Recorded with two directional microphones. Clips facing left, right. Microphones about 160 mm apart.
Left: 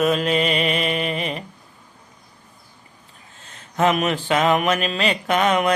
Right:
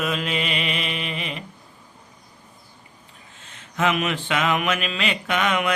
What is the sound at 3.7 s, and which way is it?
Mantra, 40° left (ahead or behind).